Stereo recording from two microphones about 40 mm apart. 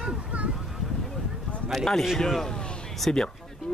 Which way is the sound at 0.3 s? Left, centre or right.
Right.